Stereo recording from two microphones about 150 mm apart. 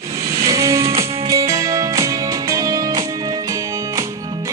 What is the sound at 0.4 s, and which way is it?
Music, 20° right (ahead or behind).